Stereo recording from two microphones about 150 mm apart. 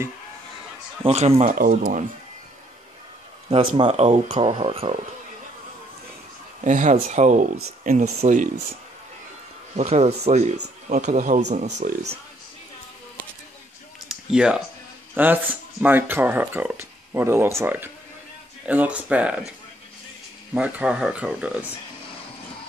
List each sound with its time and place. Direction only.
1.0 s speech: 45° right (ahead or behind)
1.5 s speech: 60° right (ahead or behind)
3.4 s speech: 40° right (ahead or behind)
6.6 s speech: 55° right (ahead or behind)
9.8 s speech: 45° right (ahead or behind); by 12.1 s 65° right (ahead or behind)
14.0 s typing: 5° right (ahead or behind)
15.1 s speech: 10° right (ahead or behind)
20.5 s speech: 5° right (ahead or behind)